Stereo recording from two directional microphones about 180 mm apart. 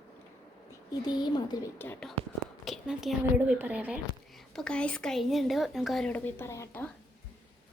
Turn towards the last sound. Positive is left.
turn(degrees=15)  # may be behind; listen again after turning